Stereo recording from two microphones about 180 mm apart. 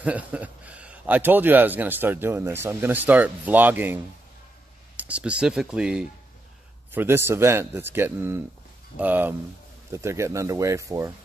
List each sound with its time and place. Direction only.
0.0 s speech: 10° right (ahead or behind)